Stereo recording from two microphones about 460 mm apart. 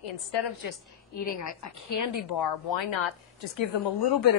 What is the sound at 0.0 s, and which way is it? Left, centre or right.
Speech, left.